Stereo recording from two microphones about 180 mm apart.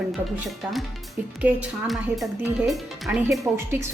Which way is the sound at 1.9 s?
Centre (ahead or behind).